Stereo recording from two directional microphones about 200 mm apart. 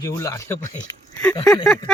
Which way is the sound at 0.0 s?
15° left (ahead or behind).